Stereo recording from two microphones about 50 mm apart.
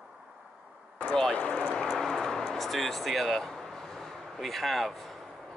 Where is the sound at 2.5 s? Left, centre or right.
Centre.